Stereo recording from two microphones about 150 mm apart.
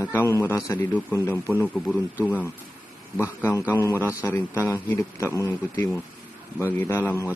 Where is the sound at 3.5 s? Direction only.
15° left (ahead or behind).